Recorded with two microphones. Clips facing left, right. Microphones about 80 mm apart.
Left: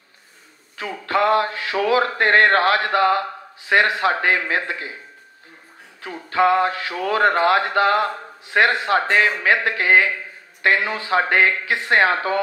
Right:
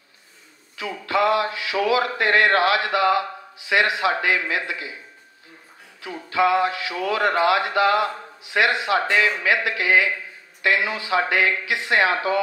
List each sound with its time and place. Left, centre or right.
0.7 s speech: left
5.9 s speech: left